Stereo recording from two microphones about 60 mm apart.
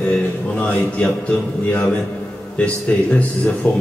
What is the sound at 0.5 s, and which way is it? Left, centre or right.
Speech, left.